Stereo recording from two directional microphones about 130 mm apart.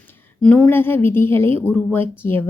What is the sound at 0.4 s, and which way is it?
Speech, 10° left (ahead or behind).